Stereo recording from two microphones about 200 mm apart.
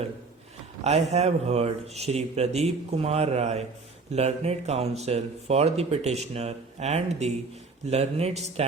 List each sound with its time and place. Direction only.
0.9 s speech: 35° right (ahead or behind)